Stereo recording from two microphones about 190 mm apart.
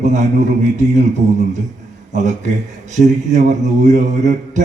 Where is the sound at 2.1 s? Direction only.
40° right (ahead or behind).